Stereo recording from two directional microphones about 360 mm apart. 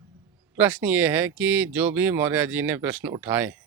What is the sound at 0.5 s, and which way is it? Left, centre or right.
Speech, centre.